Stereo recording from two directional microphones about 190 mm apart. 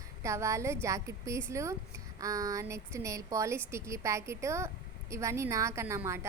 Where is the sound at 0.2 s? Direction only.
15° right (ahead or behind).